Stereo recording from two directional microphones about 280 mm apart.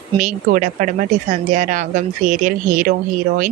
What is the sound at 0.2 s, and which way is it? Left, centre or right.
Speech, right.